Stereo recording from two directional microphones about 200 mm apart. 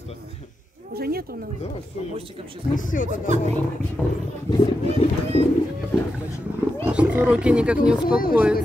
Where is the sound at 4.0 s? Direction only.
5° left (ahead or behind).